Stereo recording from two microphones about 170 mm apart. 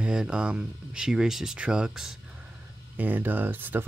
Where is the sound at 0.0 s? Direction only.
5° right (ahead or behind).